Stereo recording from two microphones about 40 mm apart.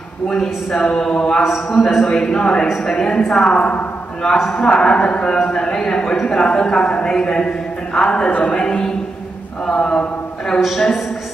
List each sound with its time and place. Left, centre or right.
0.3 s a man's voice: centre
8.3 s a man's voice: left
9.7 s a man's voice: centre
10.6 s a man's voice: centre